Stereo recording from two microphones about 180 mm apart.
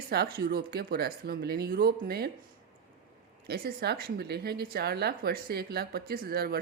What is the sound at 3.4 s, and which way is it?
Speech, 60° right (ahead or behind).